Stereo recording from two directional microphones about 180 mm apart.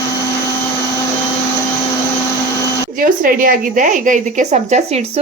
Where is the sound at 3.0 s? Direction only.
50° right (ahead or behind).